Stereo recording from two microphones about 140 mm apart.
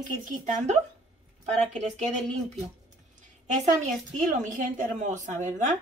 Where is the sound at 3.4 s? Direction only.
60° right (ahead or behind).